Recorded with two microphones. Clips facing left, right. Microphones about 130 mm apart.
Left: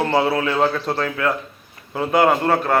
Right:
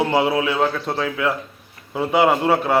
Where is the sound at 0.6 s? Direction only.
Centre (ahead or behind).